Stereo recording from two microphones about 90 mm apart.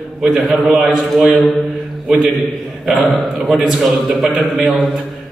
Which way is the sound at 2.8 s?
Centre (ahead or behind).